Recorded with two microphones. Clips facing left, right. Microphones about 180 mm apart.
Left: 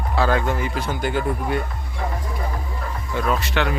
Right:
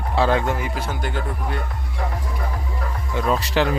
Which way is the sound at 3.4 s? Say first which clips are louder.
Right 3 dB; 35° right (ahead or behind).